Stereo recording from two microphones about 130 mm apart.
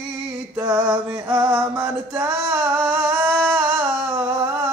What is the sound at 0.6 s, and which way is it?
Music, 20° right (ahead or behind).